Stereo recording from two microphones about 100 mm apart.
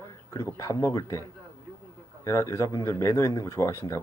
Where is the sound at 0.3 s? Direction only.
35° left (ahead or behind).